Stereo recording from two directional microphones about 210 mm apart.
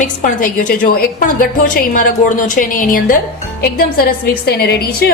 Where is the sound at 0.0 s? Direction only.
40° left (ahead or behind).